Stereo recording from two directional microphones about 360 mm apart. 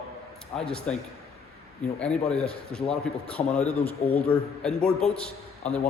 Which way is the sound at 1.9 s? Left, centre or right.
Centre.